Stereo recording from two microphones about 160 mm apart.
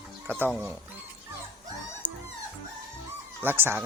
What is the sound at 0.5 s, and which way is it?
Speech, 5° right (ahead or behind).